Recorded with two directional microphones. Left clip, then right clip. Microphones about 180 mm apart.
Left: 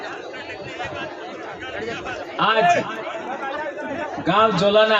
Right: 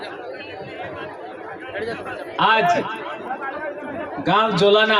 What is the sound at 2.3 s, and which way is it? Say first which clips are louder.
Speech: right 2 dB; 30° right (ahead or behind).